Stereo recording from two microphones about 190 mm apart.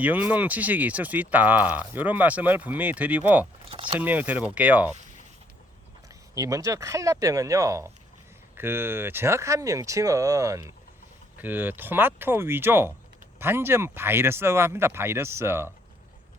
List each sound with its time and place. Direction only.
0.0 s speech: 10° right (ahead or behind)
3.7 s speech: 30° right (ahead or behind)
3.9 s speech: 10° right (ahead or behind)
6.3 s speech: 15° right (ahead or behind)